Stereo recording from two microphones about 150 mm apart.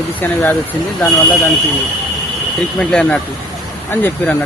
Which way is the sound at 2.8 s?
5° left (ahead or behind).